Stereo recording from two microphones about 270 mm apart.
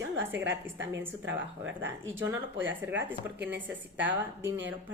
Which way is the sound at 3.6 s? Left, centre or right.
Centre.